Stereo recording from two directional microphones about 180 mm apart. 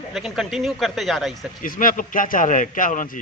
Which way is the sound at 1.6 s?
50° left (ahead or behind).